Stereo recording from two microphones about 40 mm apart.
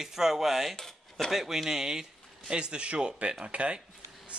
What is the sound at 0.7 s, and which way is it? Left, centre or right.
Dishes, centre.